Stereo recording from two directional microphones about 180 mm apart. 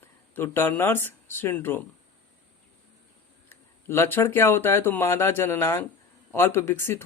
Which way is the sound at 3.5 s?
15° left (ahead or behind).